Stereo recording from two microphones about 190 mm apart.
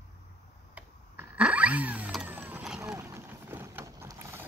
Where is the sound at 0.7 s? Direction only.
10° right (ahead or behind).